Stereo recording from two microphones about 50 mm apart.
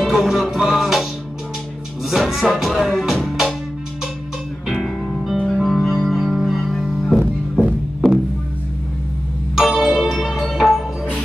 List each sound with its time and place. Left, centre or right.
0.0 s music: centre
2.0 s music: centre
5.4 s music: centre
8.0 s music: centre
9.6 s music: centre